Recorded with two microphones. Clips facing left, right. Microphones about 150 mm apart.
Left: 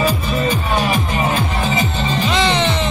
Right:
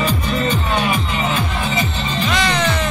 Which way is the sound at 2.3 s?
25° left (ahead or behind).